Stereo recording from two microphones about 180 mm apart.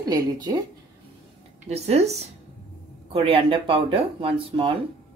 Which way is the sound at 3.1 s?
30° right (ahead or behind).